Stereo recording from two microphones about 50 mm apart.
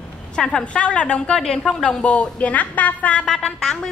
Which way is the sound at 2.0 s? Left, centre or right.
Left.